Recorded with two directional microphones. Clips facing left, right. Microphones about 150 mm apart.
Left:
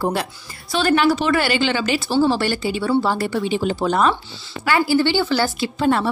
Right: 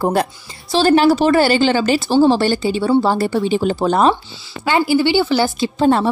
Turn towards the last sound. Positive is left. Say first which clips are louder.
# right 4 dB
turn(degrees=-30)  # may be behind; listen again after turning